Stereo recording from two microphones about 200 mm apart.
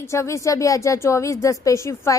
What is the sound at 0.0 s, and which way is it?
Speech, 15° left (ahead or behind).